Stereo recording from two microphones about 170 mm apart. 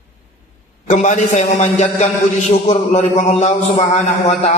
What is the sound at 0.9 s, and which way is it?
A man's voice, 45° left (ahead or behind).